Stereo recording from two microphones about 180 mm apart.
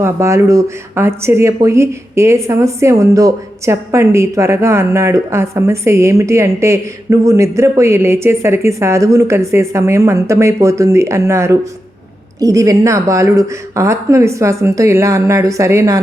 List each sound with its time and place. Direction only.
0.0 s speech: 15° right (ahead or behind)